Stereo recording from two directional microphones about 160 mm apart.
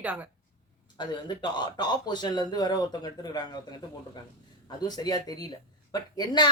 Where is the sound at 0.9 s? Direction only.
30° left (ahead or behind).